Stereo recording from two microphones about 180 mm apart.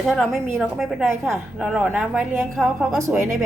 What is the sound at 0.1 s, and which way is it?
A woman's voice, centre (ahead or behind).